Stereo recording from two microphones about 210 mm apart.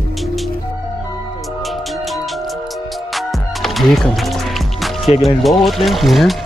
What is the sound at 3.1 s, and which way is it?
Music, centre (ahead or behind).